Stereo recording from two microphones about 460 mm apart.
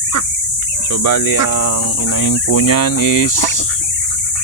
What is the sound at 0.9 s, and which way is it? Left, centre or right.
Cricket, left.